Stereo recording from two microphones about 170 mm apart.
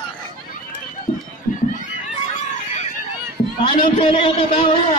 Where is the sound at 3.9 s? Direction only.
30° left (ahead or behind).